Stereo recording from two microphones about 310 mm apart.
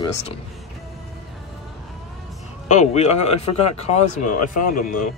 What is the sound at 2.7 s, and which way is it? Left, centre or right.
A man's voice, left.